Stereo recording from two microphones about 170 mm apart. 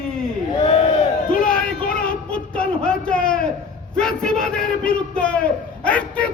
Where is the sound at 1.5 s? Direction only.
5° left (ahead or behind).